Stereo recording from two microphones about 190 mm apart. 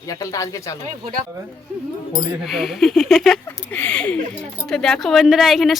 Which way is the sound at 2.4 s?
Centre (ahead or behind).